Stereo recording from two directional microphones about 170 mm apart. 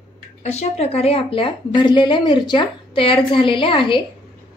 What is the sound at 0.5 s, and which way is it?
A woman's voice, 40° left (ahead or behind).